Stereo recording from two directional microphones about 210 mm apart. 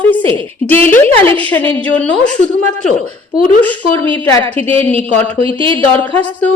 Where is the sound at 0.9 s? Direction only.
10° left (ahead or behind).